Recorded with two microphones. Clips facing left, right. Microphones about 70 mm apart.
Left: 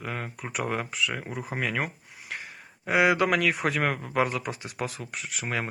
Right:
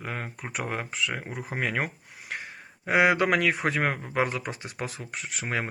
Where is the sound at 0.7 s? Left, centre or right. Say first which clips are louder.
Left 1 dB; right.